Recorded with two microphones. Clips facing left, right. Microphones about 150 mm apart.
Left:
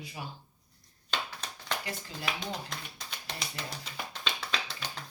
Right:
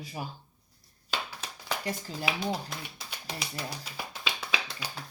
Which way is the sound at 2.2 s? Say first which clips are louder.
Right 5 dB; 5° right (ahead or behind).